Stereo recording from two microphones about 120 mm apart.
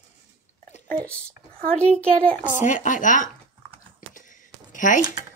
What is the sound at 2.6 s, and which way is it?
Speech, 90° left.